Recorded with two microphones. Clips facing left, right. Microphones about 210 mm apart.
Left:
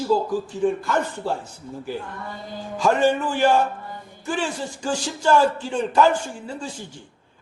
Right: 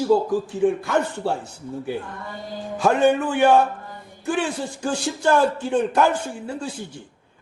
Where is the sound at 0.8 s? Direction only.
65° right (ahead or behind).